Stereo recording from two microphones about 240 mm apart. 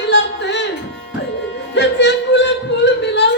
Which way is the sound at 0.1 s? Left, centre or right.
Left.